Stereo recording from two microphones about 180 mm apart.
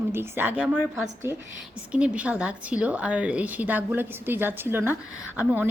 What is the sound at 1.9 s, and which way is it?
A woman's voice, 5° right (ahead or behind).